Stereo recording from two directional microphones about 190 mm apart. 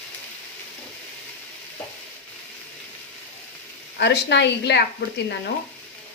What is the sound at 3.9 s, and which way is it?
Speech, 60° left (ahead or behind).